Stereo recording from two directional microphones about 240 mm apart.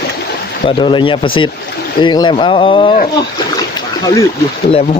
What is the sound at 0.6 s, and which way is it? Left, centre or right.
Speech, centre.